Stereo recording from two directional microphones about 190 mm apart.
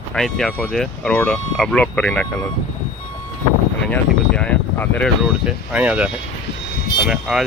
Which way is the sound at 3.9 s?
5° left (ahead or behind).